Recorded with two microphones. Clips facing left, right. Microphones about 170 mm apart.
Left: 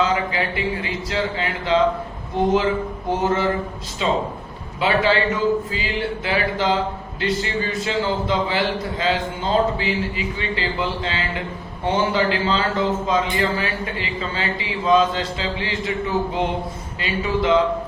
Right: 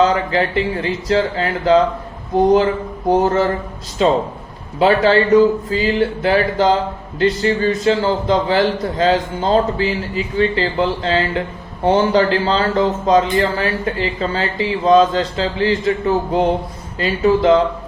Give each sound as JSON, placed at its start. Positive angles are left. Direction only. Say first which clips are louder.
{"t": 0.0, "sound": "a man's voice", "louder": "right 6 dB", "side_deg": -40}